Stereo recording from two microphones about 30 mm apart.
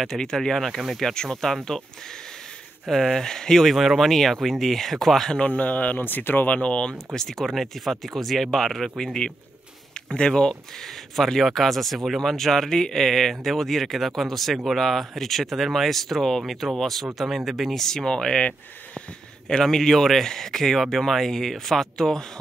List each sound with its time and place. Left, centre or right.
0.4 s speech: centre
1.1 s speech: left
2.9 s speech: centre
3.7 s speech: centre
4.0 s speech: centre
5.4 s speech: left
5.9 s speech: left
6.5 s speech: left
7.2 s speech: centre
7.5 s speech: centre
10.0 s speech: left
11.1 s speech: centre
17.7 s speech: centre
19.6 s speech: centre